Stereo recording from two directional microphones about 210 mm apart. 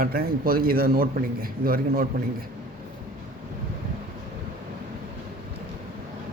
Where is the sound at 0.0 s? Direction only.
45° right (ahead or behind).